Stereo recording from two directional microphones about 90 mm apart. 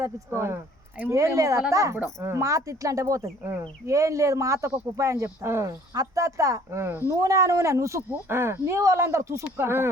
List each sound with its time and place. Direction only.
0.0 s speech: 30° right (ahead or behind)
1.1 s speech: 35° right (ahead or behind)
5.9 s speech: 40° right (ahead or behind); by 7.2 s 25° right (ahead or behind)
7.2 s speech: 35° right (ahead or behind)